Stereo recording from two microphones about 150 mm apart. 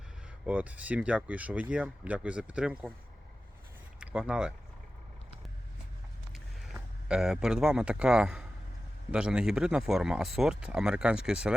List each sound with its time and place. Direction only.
0.4 s speech: 10° right (ahead or behind)
4.0 s speech: 10° right (ahead or behind)
7.1 s speech: 5° right (ahead or behind)